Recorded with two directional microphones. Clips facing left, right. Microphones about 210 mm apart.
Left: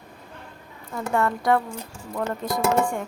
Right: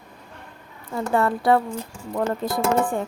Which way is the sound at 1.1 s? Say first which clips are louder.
Right 2 dB; 30° right (ahead or behind).